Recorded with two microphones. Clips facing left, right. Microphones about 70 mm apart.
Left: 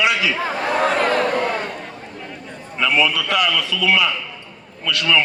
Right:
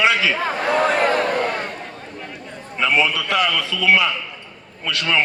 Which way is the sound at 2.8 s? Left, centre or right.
Right.